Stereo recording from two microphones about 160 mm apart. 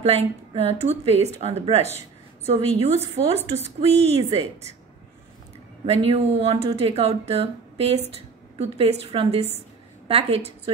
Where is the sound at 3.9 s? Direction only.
40° right (ahead or behind).